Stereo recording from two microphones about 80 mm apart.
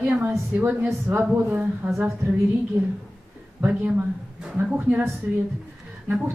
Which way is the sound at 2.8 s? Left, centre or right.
Right.